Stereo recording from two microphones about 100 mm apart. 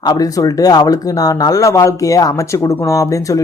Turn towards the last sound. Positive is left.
turn(degrees=35)  # may be behind; listen again after turning